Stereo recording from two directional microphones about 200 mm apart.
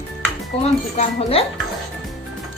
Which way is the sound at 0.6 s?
30° left (ahead or behind).